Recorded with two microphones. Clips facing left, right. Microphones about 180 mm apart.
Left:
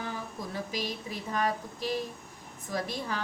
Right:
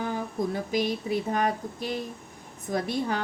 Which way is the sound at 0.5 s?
50° right (ahead or behind).